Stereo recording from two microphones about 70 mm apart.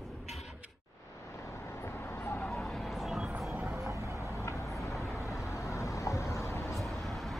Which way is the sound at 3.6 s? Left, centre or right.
Right.